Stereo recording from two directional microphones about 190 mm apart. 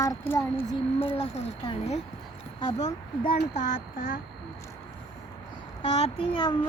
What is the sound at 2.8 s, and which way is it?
Speech, 40° left (ahead or behind).